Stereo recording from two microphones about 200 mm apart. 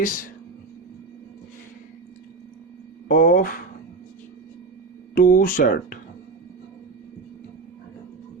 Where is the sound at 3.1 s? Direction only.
45° left (ahead or behind).